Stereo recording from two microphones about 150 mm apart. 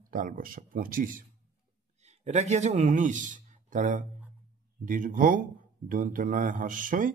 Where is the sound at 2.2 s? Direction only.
50° right (ahead or behind).